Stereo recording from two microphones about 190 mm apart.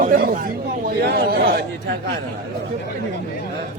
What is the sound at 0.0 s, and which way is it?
Chatter, 45° right (ahead or behind).